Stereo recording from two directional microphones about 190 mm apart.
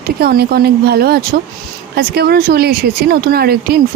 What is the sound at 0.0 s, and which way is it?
Speech, 55° right (ahead or behind).